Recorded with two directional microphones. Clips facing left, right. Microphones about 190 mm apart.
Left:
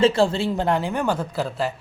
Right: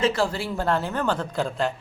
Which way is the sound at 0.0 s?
25° left (ahead or behind).